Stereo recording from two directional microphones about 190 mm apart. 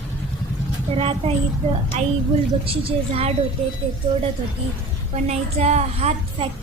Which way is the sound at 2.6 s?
30° right (ahead or behind).